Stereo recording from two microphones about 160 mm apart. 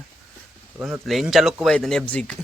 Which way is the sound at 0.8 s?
Centre (ahead or behind).